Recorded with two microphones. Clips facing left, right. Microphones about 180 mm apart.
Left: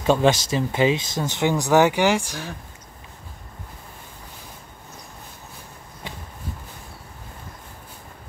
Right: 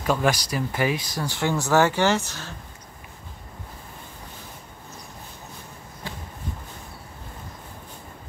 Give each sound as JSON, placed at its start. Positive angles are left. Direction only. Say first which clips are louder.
{"t": 0.0, "sound": "speech", "louder": "left 5 dB", "side_deg": 25}